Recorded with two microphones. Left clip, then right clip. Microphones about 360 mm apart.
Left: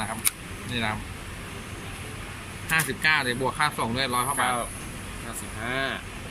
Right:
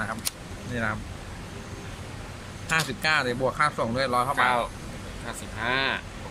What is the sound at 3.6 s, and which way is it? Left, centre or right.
Speech, centre.